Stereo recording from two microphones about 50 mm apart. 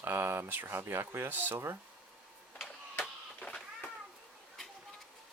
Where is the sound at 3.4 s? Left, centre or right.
Left.